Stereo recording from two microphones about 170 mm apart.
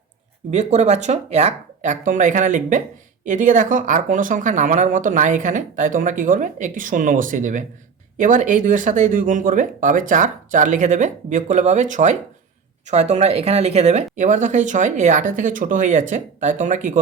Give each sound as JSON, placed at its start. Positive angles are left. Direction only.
{"t": 0.5, "sound": "speech", "side_deg": -45}